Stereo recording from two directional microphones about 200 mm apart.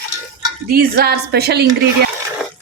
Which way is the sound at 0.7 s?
50° right (ahead or behind).